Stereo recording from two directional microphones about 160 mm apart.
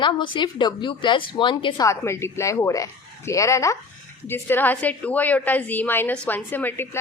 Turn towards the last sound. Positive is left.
turn(degrees=10)  # may be behind; listen again after turning